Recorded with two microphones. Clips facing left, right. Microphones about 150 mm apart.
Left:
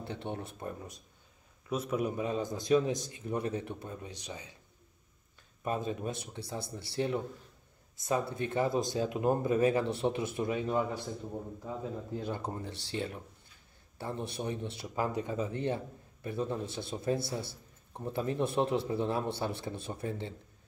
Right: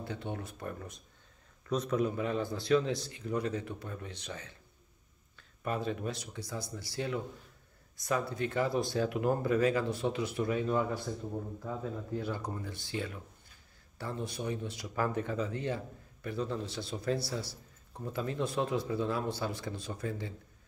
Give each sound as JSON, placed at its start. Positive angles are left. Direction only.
{"t": 0.0, "sound": "a man's voice", "side_deg": 25}
{"t": 5.6, "sound": "a man's voice", "side_deg": 20}
{"t": 12.2, "sound": "a man's voice", "side_deg": 25}